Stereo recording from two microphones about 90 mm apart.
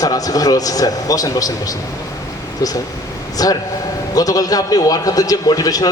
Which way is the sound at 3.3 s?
45° left (ahead or behind).